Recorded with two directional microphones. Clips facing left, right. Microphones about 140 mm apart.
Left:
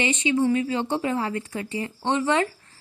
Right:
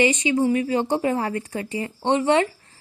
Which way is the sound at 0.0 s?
35° right (ahead or behind).